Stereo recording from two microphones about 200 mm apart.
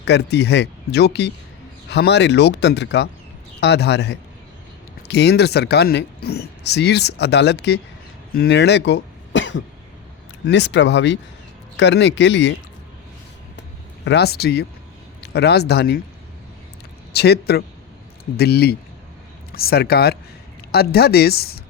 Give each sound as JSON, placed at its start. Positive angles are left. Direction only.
{"t": 0.0, "sound": "speech", "side_deg": 55}
{"t": 13.6, "sound": "a sound", "side_deg": 60}
{"t": 15.2, "sound": "speech", "side_deg": 55}
{"t": 17.1, "sound": "speech", "side_deg": 55}